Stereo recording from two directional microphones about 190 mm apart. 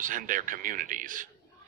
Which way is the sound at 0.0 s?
45° right (ahead or behind).